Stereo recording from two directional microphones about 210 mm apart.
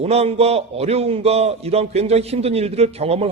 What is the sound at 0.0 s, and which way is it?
A man's voice, 30° right (ahead or behind).